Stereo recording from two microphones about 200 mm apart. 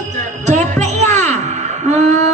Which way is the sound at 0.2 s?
35° right (ahead or behind).